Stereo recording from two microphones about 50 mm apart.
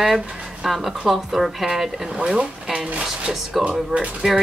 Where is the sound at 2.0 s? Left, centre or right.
Centre.